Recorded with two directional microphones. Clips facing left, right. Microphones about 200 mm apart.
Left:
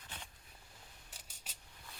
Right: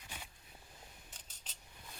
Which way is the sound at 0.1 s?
10° right (ahead or behind).